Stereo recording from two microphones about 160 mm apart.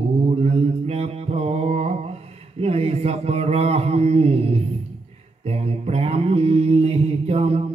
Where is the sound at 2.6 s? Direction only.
40° right (ahead or behind).